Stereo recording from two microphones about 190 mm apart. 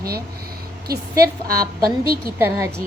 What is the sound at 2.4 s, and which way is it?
Speech, 15° right (ahead or behind).